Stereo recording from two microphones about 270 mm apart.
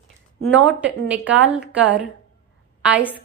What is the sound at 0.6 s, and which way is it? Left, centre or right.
A woman's voice, centre.